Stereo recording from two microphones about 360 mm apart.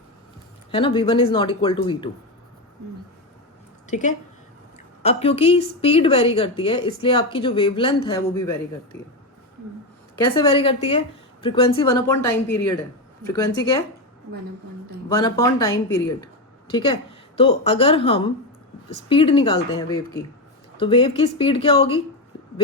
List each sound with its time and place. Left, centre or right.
0.7 s a woman's voice: centre
3.8 s a woman's voice: centre
10.2 s a woman's voice: centre
15.2 s a woman's voice: centre